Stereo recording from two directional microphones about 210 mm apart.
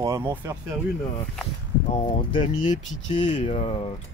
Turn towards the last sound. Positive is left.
turn(degrees=30)  # may be behind; listen again after turning